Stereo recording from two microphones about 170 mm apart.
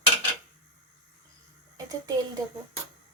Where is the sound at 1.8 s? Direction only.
20° right (ahead or behind).